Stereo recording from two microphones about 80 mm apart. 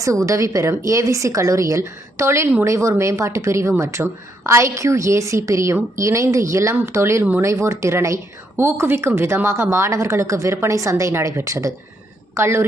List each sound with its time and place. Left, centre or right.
0.0 s speech: right